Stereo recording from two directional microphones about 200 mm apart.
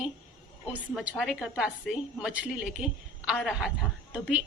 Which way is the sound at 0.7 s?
5° right (ahead or behind).